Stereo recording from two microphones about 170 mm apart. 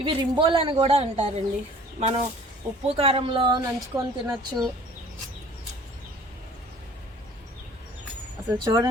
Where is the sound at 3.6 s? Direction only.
20° right (ahead or behind).